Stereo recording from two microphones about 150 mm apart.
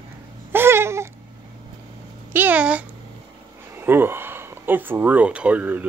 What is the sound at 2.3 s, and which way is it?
Speech, 10° right (ahead or behind).